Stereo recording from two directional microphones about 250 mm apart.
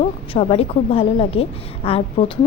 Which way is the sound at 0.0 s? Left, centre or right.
Left.